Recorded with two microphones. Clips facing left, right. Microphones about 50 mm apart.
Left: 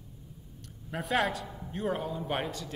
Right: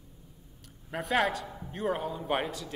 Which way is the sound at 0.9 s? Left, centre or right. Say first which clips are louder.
Right 1 dB; centre.